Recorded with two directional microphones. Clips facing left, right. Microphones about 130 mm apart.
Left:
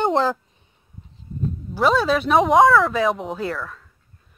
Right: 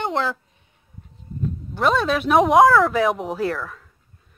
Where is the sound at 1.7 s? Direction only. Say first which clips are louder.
Left 2 dB; centre (ahead or behind).